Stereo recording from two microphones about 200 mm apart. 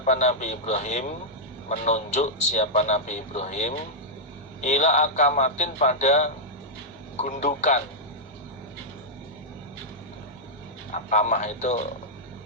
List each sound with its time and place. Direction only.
0.0 s a man's voice: 35° left (ahead or behind)
10.9 s a man's voice: 35° left (ahead or behind)